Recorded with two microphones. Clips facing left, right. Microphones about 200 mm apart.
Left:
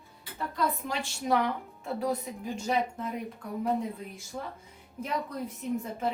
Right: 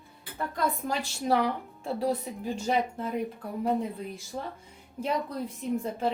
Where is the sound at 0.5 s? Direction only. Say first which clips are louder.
Right 1 dB; 45° right (ahead or behind).